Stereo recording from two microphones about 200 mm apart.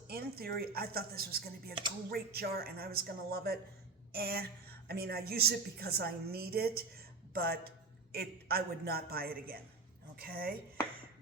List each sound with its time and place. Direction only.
0.1 s a woman's voice: 50° right (ahead or behind)